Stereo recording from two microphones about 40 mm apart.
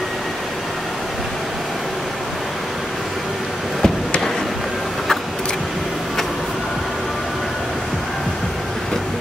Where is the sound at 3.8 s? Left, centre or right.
Centre.